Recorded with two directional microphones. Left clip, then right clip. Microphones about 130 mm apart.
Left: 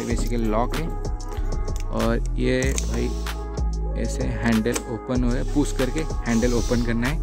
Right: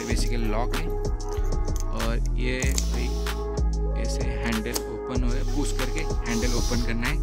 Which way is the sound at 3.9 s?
35° left (ahead or behind).